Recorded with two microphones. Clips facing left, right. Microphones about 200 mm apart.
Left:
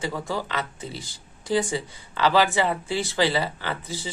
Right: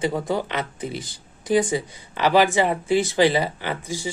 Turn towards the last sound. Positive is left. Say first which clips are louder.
# right 3 dB
turn(degrees=-15)  # may be behind; listen again after turning